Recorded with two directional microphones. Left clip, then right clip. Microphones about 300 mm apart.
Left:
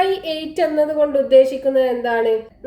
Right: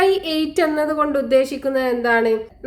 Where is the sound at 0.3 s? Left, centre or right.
Right.